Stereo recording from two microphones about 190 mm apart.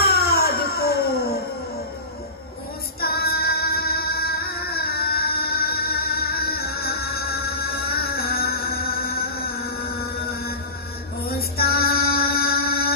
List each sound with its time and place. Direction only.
0.0 s music: 55° left (ahead or behind)
3.0 s music: 55° left (ahead or behind)